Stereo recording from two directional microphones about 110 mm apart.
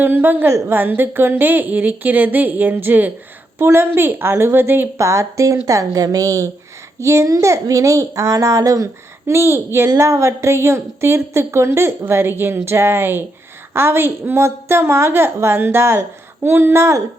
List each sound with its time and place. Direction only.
0.0 s a woman's voice: 20° right (ahead or behind)